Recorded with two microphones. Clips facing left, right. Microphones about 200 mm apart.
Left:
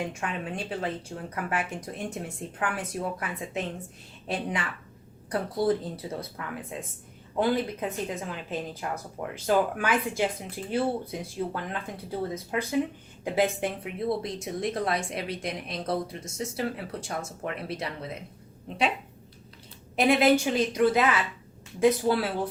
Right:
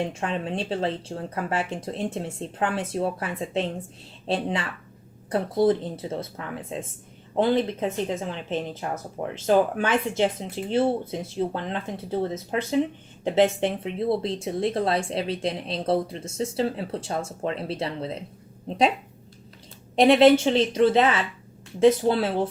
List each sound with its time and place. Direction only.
0.0 s speech: 25° right (ahead or behind)
20.0 s speech: 30° right (ahead or behind)